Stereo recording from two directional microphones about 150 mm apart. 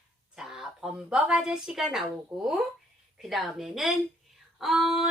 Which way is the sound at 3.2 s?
Centre (ahead or behind).